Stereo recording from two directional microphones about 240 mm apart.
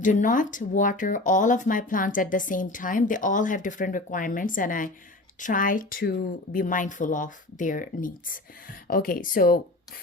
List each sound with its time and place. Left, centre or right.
0.0 s speech: left